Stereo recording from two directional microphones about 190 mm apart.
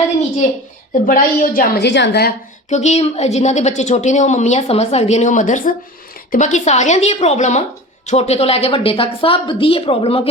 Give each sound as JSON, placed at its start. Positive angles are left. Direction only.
{"t": 1.0, "sound": "a woman's voice", "side_deg": 45}
{"t": 1.9, "sound": "a woman's voice", "side_deg": 60}
{"t": 2.6, "sound": "a woman's voice", "side_deg": 35}